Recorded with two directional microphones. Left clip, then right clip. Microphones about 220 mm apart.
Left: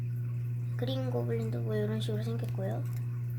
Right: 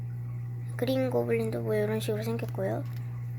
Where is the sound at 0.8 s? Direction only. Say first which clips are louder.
Right 8 dB; 20° right (ahead or behind).